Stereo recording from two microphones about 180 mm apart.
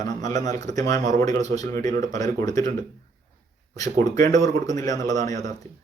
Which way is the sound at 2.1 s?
20° left (ahead or behind).